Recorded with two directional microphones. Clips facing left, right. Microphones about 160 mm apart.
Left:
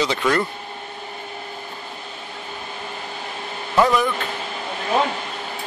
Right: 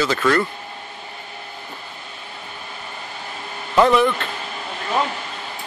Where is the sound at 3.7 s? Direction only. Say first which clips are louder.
Right 3 dB; 5° left (ahead or behind).